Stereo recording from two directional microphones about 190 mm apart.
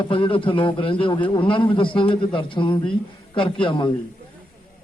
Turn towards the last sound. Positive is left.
turn(degrees=25)  # may be behind; listen again after turning